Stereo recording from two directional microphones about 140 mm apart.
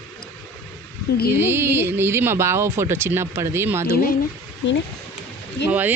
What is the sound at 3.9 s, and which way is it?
Speech, 90° left.